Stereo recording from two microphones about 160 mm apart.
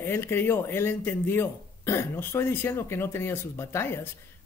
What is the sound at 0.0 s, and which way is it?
A man's voice, 15° left (ahead or behind).